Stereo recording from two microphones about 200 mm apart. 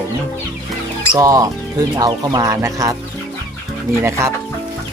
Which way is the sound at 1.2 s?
15° right (ahead or behind).